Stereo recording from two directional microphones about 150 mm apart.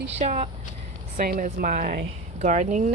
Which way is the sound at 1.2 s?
65° right (ahead or behind).